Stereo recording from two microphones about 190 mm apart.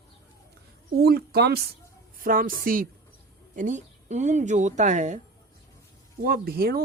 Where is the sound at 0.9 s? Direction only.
55° right (ahead or behind); by 5.2 s 40° right (ahead or behind).